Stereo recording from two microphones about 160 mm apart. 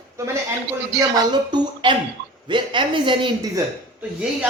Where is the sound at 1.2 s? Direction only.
25° right (ahead or behind).